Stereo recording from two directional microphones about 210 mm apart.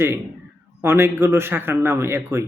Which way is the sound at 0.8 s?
10° right (ahead or behind).